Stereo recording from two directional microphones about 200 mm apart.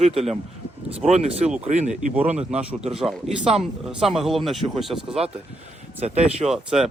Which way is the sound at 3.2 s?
30° right (ahead or behind).